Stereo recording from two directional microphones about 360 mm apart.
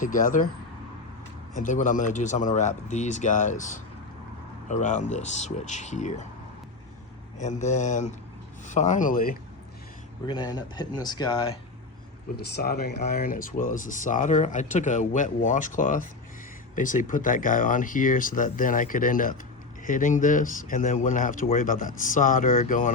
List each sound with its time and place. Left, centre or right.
0.0 s speech: left
1.5 s speech: left
7.3 s speech: centre
10.2 s speech: centre
12.5 s speech: left